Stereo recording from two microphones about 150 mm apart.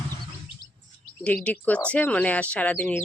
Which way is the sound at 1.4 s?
10° left (ahead or behind).